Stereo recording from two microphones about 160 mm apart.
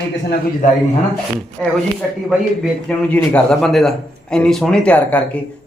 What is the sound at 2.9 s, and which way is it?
Speech, 5° left (ahead or behind).